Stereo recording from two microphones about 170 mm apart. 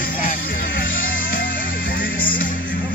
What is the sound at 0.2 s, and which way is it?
Music, 55° left (ahead or behind).